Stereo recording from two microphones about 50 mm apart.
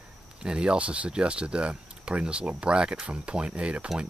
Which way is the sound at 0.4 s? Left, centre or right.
Centre.